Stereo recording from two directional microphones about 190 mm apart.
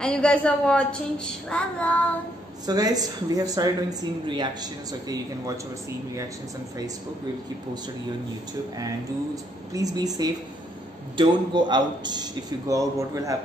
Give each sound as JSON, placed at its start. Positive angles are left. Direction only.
{"t": 0.0, "sound": "a woman's voice", "side_deg": 5}
{"t": 2.6, "sound": "a man's voice", "side_deg": -20}
{"t": 8.7, "sound": "a man's voice", "side_deg": -20}